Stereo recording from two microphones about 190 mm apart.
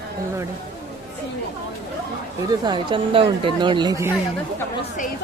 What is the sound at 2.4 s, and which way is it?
Speech, 20° right (ahead or behind).